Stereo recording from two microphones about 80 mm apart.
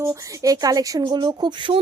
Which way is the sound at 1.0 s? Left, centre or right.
Right.